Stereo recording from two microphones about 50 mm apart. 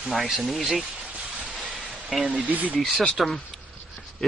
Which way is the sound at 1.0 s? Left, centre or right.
Right.